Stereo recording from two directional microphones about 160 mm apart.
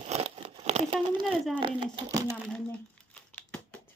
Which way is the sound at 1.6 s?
30° right (ahead or behind).